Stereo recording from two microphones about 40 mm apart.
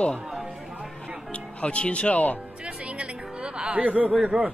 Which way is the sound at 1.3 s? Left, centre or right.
Left.